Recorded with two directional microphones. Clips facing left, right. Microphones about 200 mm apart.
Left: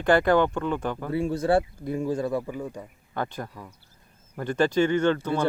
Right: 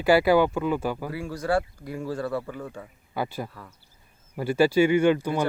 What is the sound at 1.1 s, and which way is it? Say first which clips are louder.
Speech: left 6 dB; 25° left (ahead or behind).